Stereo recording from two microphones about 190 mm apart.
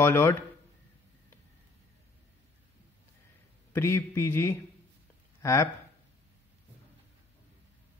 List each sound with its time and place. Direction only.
0.0 s a man's voice: 15° left (ahead or behind)
3.7 s a man's voice: 15° left (ahead or behind)